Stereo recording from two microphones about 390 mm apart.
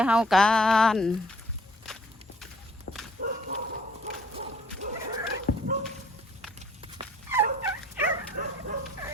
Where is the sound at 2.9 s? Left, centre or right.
Left.